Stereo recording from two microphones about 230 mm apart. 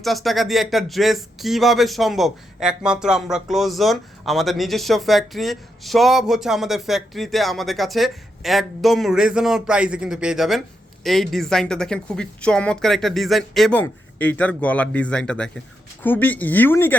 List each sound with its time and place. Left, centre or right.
0.0 s speech: centre